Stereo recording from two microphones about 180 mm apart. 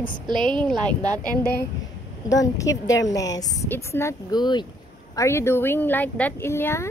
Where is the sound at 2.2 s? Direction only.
20° left (ahead or behind).